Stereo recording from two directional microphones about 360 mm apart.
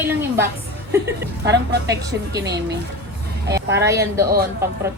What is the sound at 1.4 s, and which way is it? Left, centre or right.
Speech, right.